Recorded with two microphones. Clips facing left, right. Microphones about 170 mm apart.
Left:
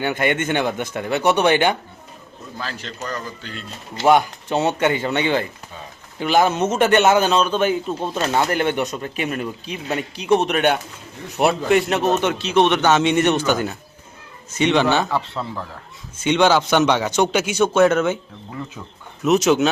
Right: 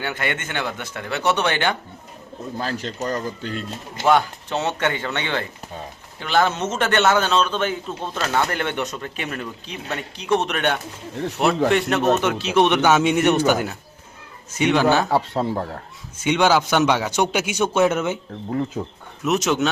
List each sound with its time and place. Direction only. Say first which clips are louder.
0.0 s a man's voice: left 6 dB; 20° left (ahead or behind)
2.6 s speech: right 4 dB; 45° right (ahead or behind)
3.0 s speech: right 3 dB; 25° right (ahead or behind)
3.4 s speech: right 5 dB; 45° right (ahead or behind)
4.0 s a man's voice: left 3 dB; 15° left (ahead or behind); by 15.0 s 5° right (ahead or behind)
15.1 s speech: right 4 dB; 40° right (ahead or behind)
16.2 s a man's voice: left 2 dB; 10° right (ahead or behind)
18.8 s speech: right 9 dB; 35° right (ahead or behind)
19.2 s speech: left 4 dB; centre (ahead or behind)